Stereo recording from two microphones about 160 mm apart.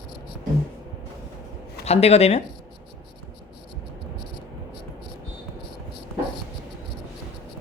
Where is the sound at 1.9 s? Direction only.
40° left (ahead or behind).